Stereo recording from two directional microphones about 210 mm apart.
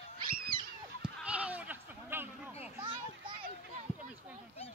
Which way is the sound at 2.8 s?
20° right (ahead or behind).